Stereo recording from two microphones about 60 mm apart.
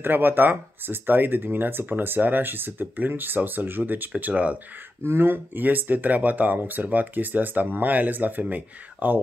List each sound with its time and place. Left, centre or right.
0.0 s speech: right
4.1 s speech: right
5.0 s speech: right